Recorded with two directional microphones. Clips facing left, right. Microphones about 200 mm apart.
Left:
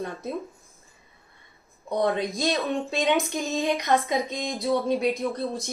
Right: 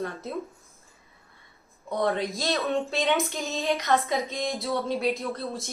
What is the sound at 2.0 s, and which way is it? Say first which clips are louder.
Speech: left 2 dB; 15° left (ahead or behind).